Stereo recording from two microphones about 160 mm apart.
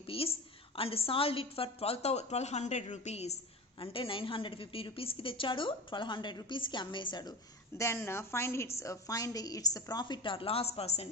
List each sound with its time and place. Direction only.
0.1 s a woman's voice: 35° left (ahead or behind)
7.8 s a woman's voice: 15° left (ahead or behind); by 11.1 s 40° left (ahead or behind)